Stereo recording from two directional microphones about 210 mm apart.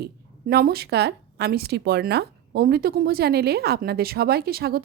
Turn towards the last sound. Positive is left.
turn(degrees=-45)  # may be behind; listen again after turning